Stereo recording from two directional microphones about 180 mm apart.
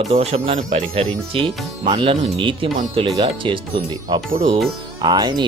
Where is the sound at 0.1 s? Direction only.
35° right (ahead or behind).